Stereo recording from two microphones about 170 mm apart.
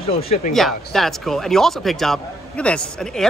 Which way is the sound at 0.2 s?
35° left (ahead or behind).